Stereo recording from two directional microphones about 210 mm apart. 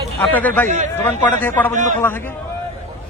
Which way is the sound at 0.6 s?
35° right (ahead or behind).